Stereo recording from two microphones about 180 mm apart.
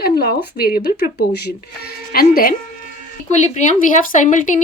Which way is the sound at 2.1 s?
55° left (ahead or behind).